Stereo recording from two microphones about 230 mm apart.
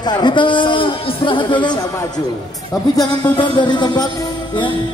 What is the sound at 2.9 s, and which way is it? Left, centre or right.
A man's voice, centre.